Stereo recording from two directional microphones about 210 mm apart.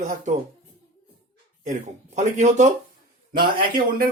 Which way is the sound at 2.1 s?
35° right (ahead or behind).